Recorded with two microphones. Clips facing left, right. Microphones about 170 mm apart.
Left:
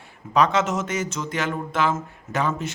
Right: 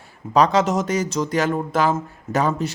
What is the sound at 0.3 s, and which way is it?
Speech, 35° right (ahead or behind).